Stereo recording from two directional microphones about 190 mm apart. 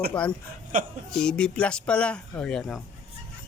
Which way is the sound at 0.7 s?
45° right (ahead or behind).